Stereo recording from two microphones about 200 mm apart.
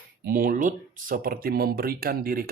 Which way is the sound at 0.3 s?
45° right (ahead or behind).